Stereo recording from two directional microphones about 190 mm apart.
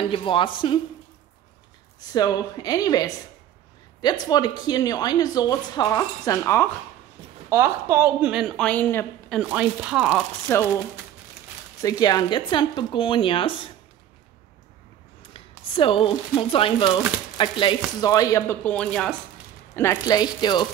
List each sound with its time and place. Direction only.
0.1 s speech: 25° left (ahead or behind)
2.1 s speech: 20° left (ahead or behind)
7.4 s a woman's voice: 15° right (ahead or behind); by 9.4 s 10° left (ahead or behind)
9.4 s a woman's voice: 5° right (ahead or behind)
10.5 s speech: 10° left (ahead or behind)
11.8 s speech: 20° left (ahead or behind)
15.3 s speech: 30° left (ahead or behind)